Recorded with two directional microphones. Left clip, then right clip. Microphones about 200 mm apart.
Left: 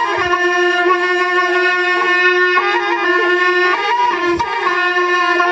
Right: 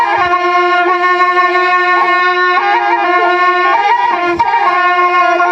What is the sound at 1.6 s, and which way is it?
Music, 40° right (ahead or behind).